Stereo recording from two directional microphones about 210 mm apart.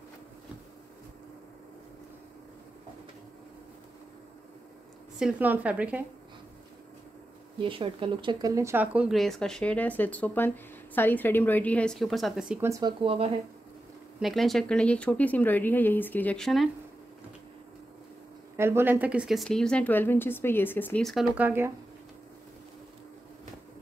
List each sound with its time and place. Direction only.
5.2 s a woman's voice: 5° right (ahead or behind)
7.6 s a woman's voice: 25° right (ahead or behind)
13.0 s speech: 25° right (ahead or behind)
14.2 s a woman's voice: centre (ahead or behind)
18.6 s a woman's voice: 10° right (ahead or behind)